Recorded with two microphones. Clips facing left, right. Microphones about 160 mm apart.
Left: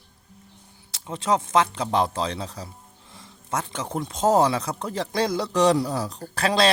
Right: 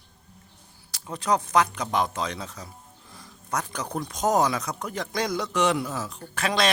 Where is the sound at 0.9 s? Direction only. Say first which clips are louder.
Left 1 dB; 25° left (ahead or behind).